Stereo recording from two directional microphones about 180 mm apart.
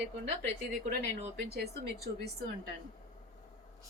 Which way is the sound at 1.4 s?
65° right (ahead or behind).